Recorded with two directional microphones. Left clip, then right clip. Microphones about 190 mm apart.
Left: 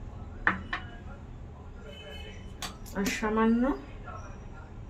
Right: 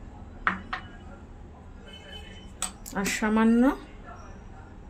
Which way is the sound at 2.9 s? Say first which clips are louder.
Right 3 dB; 65° right (ahead or behind).